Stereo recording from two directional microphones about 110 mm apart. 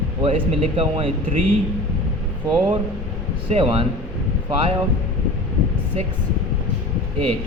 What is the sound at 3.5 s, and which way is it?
Speech, 65° right (ahead or behind).